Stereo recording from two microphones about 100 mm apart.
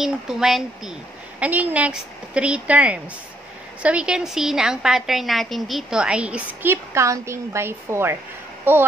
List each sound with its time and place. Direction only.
0.0 s a woman's voice: 5° right (ahead or behind)
1.4 s a woman's voice: 15° right (ahead or behind)
6.7 s a woman's voice: 30° right (ahead or behind)